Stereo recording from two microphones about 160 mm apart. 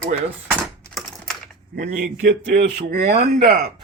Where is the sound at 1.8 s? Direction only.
50° right (ahead or behind).